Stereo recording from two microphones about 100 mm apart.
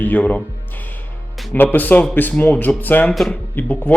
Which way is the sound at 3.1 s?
Centre (ahead or behind).